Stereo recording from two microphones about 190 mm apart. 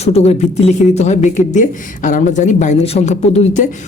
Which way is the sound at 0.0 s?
35° left (ahead or behind).